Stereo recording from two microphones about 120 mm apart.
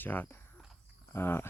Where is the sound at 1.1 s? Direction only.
20° left (ahead or behind).